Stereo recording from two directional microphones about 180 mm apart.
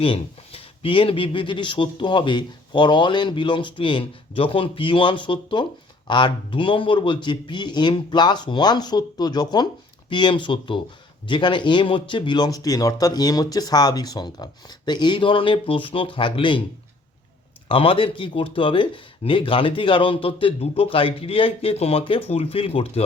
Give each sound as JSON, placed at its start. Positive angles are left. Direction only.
{"t": 0.0, "sound": "speech", "side_deg": 30}
{"t": 17.7, "sound": "speech", "side_deg": 30}